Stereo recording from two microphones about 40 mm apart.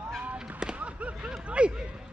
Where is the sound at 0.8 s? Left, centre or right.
Right.